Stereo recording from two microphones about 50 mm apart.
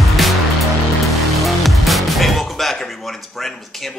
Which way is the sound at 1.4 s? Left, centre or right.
Centre.